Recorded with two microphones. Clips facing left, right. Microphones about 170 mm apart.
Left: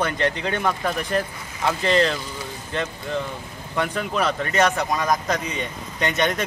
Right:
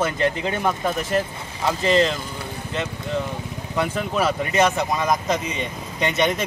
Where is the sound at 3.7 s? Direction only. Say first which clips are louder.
Right 1 dB; 5° right (ahead or behind).